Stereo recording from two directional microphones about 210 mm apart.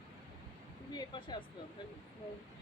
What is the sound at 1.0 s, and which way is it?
Speech, 20° left (ahead or behind).